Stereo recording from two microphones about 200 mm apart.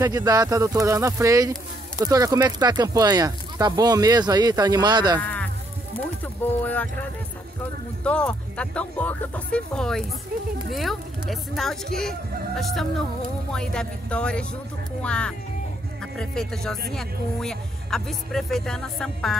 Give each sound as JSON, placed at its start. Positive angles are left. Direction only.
{"t": 0.0, "sound": "speech", "side_deg": -20}
{"t": 5.2, "sound": "a sound", "side_deg": 5}
{"t": 6.2, "sound": "speech", "side_deg": 10}
{"t": 8.0, "sound": "speech", "side_deg": 5}